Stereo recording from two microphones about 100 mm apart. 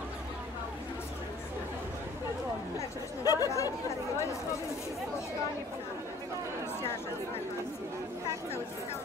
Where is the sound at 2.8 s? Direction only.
35° left (ahead or behind).